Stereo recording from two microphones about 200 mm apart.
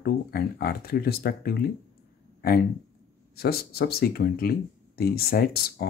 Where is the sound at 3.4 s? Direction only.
50° left (ahead or behind).